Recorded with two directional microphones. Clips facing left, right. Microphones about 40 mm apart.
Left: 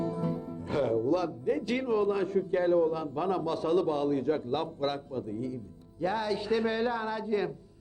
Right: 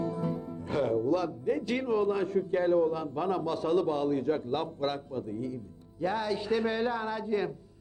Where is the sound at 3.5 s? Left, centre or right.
Right.